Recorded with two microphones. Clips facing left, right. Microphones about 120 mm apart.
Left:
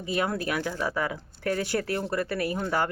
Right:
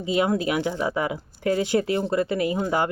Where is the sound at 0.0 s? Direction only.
20° right (ahead or behind).